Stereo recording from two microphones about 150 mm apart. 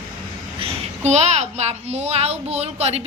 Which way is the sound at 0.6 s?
45° right (ahead or behind).